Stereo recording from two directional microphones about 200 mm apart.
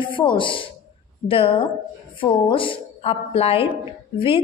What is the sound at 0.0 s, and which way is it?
A woman's voice, 25° left (ahead or behind).